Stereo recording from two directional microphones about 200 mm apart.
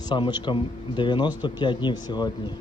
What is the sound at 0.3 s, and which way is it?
Speech, 25° left (ahead or behind).